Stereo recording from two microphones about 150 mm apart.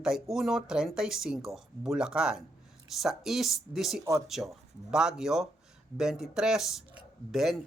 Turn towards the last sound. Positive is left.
turn(degrees=0)  # may be behind; listen again after turning